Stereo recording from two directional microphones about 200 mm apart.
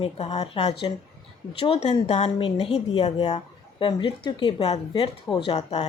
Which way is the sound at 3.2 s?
35° left (ahead or behind).